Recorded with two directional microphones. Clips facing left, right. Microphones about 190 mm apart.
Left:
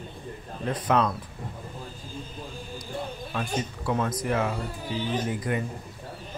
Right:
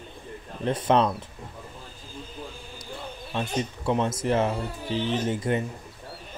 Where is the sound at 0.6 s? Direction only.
25° right (ahead or behind).